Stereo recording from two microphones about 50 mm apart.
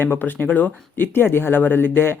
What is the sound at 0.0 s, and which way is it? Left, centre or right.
Speech, left.